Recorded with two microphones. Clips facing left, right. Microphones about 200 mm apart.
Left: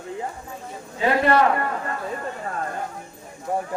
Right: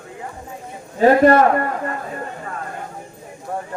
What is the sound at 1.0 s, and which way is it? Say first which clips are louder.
Speech: right 7 dB; 45° right (ahead or behind).